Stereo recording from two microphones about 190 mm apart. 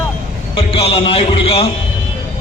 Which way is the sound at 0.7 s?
30° left (ahead or behind).